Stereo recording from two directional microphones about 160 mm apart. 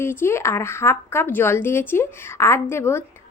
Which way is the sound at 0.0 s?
15° left (ahead or behind).